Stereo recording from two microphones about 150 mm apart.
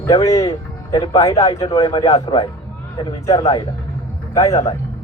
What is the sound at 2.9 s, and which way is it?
A man's voice, 30° left (ahead or behind).